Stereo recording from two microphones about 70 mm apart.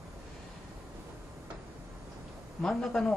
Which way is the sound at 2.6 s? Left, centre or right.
Centre.